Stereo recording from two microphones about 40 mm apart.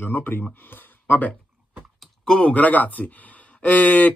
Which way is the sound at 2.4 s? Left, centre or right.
Left.